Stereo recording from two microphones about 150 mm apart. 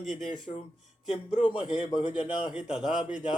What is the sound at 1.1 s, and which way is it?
A man's voice, 35° left (ahead or behind).